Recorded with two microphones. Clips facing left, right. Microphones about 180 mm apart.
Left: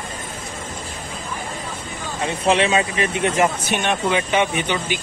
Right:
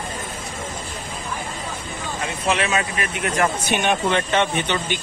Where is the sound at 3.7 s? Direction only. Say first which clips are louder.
Even; centre (ahead or behind).